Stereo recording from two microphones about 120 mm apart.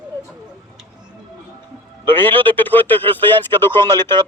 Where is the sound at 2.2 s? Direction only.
15° left (ahead or behind).